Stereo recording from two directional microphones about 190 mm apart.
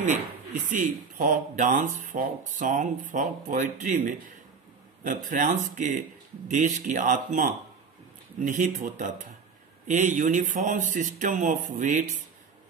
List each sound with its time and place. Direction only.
0.0 s speech: 40° right (ahead or behind)